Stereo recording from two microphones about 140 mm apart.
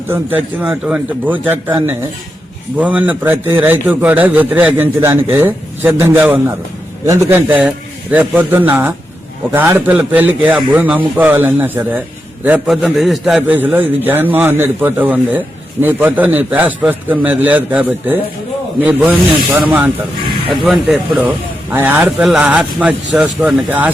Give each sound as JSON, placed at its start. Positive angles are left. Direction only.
{"t": 0.1, "sound": "a man's voice", "side_deg": -10}
{"t": 2.7, "sound": "a man's voice", "side_deg": -10}
{"t": 13.6, "sound": "a man's voice", "side_deg": -15}
{"t": 20.5, "sound": "a man's voice", "side_deg": 0}
{"t": 21.2, "sound": "a man's voice", "side_deg": -15}